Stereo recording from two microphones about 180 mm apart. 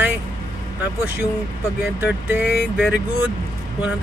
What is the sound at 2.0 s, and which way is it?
Speech, 10° right (ahead or behind).